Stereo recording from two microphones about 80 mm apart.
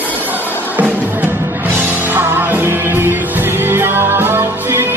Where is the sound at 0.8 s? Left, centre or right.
Right.